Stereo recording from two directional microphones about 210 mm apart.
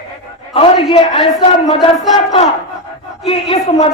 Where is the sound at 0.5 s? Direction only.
25° left (ahead or behind).